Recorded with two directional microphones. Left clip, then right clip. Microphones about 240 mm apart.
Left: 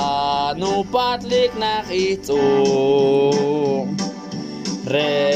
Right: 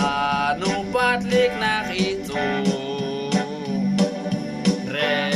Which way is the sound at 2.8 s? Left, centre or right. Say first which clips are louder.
Left 12 dB; left.